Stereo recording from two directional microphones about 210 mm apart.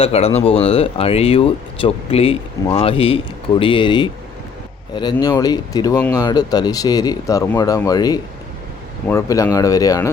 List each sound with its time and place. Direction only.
0.0 s speech: 30° left (ahead or behind)
5.1 s speech: 20° left (ahead or behind)